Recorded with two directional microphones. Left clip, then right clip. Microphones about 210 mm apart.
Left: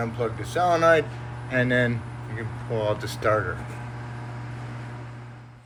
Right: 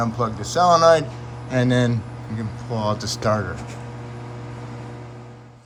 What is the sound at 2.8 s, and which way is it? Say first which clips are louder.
Speech: right 3 dB; 25° right (ahead or behind).